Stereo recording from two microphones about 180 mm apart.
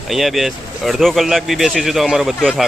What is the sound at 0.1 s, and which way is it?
Speech, centre (ahead or behind).